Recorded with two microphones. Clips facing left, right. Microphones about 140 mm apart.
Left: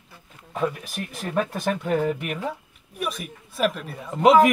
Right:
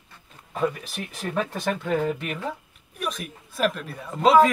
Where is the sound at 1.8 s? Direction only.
10° left (ahead or behind).